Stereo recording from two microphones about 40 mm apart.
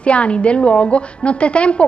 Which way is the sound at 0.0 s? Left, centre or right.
Left.